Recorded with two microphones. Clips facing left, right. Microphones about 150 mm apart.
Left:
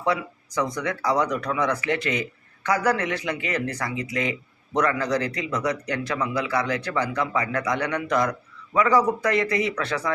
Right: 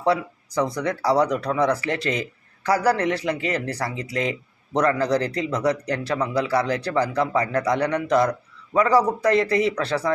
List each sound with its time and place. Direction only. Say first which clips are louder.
0.0 s speech: right 4 dB; 30° right (ahead or behind)